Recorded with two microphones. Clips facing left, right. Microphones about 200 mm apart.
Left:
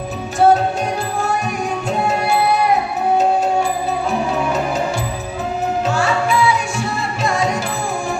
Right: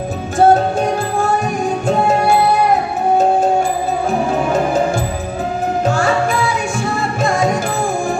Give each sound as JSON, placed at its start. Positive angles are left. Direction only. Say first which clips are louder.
{"t": 0.3, "sound": "music", "louder": "right 2 dB", "side_deg": -50}
{"t": 4.3, "sound": "music", "louder": "right 3 dB", "side_deg": -50}
{"t": 5.8, "sound": "music", "louder": "right 4 dB", "side_deg": -50}